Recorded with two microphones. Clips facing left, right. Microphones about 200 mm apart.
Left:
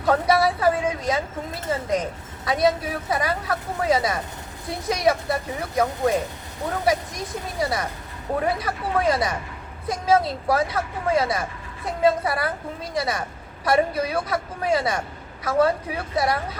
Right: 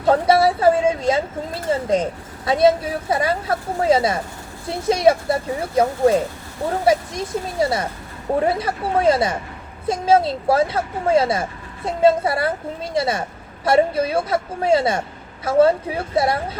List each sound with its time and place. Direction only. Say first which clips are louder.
0.0 s a woman's voice: right 4 dB; 25° right (ahead or behind)